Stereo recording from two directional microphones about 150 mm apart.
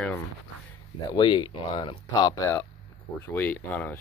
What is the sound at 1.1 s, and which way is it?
Speech, 30° left (ahead or behind).